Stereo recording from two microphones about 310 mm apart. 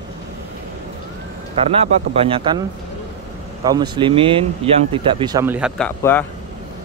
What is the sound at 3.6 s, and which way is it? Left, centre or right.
Speech, centre.